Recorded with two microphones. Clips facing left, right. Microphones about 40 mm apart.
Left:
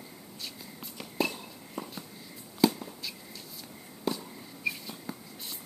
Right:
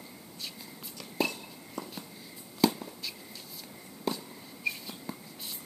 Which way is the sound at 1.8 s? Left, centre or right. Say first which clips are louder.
Left 1 dB; centre.